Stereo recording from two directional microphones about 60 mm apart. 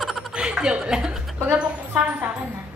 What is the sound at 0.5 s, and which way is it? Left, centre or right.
Speech, centre.